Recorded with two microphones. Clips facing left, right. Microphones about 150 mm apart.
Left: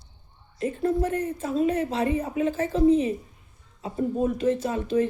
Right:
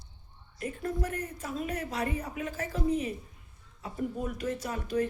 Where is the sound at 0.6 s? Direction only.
30° left (ahead or behind).